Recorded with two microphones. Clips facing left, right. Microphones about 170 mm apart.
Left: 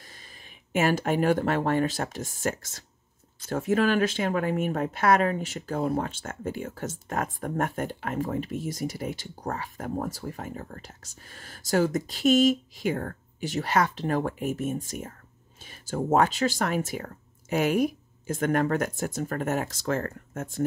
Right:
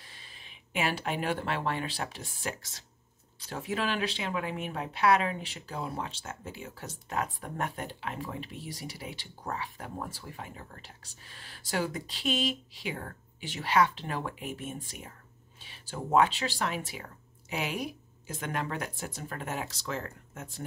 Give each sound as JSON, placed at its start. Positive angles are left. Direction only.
{"t": 0.0, "sound": "speech", "side_deg": 45}